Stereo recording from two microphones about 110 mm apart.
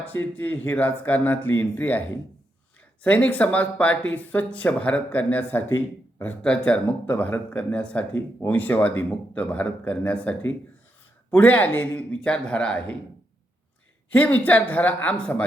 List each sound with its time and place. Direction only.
0.0 s speech: 15° left (ahead or behind)
14.1 s speech: 15° left (ahead or behind)